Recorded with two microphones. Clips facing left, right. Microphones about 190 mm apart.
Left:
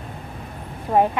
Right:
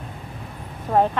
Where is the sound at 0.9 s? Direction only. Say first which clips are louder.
Left 1 dB; 10° left (ahead or behind).